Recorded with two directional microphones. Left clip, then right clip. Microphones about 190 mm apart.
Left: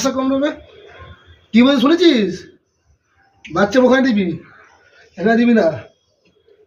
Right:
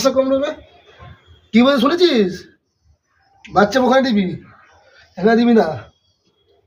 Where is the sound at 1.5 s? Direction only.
35° right (ahead or behind).